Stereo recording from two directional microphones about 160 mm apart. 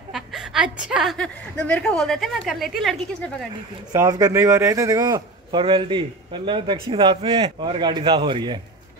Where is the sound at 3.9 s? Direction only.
20° right (ahead or behind).